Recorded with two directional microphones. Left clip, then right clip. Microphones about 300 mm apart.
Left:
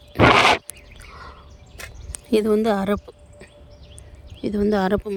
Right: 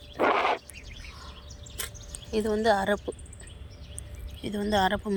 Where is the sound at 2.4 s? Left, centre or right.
Left.